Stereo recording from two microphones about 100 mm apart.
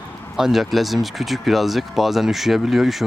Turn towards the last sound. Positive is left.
turn(degrees=0)  # may be behind; listen again after turning